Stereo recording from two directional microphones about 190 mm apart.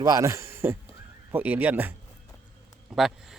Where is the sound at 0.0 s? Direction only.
15° right (ahead or behind).